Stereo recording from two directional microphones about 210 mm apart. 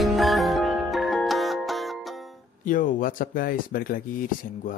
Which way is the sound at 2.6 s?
40° left (ahead or behind).